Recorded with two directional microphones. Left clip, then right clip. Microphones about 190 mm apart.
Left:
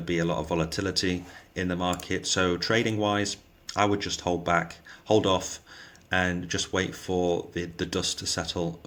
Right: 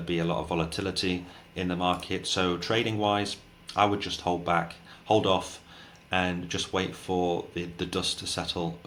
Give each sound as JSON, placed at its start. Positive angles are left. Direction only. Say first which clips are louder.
{"t": 0.0, "sound": "speech", "louder": "left 1 dB", "side_deg": 45}